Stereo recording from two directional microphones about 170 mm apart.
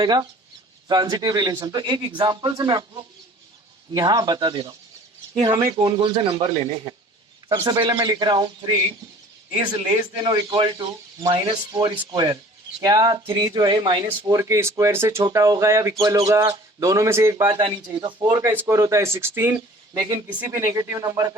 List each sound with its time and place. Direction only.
0.0 s speech: 25° right (ahead or behind)
3.9 s speech: 25° right (ahead or behind)
9.8 s speech: 25° right (ahead or behind)
17.5 s speech: 30° right (ahead or behind)